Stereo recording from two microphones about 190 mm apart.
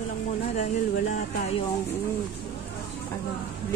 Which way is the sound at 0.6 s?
40° left (ahead or behind).